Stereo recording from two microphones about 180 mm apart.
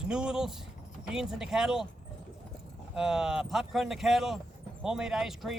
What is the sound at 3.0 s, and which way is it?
Speech, 5° right (ahead or behind).